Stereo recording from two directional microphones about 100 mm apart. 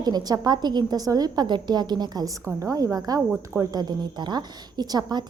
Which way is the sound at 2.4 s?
35° right (ahead or behind).